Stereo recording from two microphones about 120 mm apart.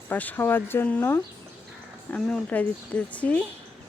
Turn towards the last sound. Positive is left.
turn(degrees=10)  # may be behind; listen again after turning